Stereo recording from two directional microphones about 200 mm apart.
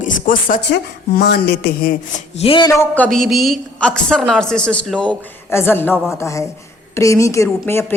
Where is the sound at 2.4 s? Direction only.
25° left (ahead or behind).